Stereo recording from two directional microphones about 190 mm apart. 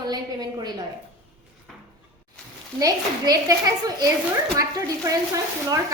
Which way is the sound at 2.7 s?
20° right (ahead or behind).